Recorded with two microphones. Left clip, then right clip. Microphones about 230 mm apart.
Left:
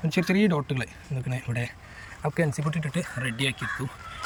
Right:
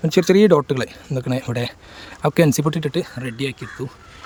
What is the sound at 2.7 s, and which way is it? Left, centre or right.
Speech, right.